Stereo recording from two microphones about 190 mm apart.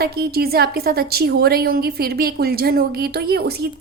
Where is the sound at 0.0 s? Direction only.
55° right (ahead or behind).